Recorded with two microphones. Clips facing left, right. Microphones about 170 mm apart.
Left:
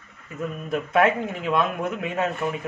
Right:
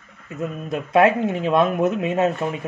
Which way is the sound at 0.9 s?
25° right (ahead or behind).